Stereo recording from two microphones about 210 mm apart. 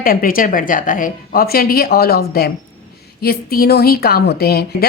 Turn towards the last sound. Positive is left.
turn(degrees=50)  # may be behind; listen again after turning